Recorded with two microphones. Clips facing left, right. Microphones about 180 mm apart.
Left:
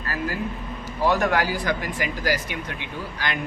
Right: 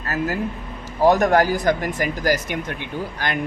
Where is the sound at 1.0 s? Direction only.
45° right (ahead or behind).